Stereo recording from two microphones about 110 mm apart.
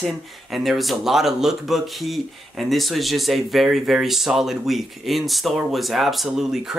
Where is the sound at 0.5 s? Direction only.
Centre (ahead or behind).